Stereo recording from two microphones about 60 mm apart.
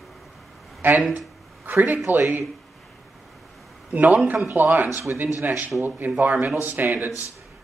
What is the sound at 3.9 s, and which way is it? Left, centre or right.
Speech, right.